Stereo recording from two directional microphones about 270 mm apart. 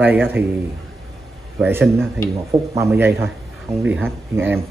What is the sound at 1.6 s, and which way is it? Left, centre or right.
Speech, centre.